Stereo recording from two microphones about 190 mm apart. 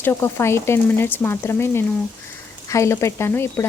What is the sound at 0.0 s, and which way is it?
Speech, 15° left (ahead or behind).